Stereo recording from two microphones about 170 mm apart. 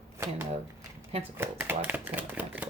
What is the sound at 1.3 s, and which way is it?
Speech, 10° right (ahead or behind).